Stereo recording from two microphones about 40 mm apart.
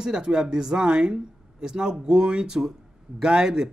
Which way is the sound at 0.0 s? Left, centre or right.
Centre.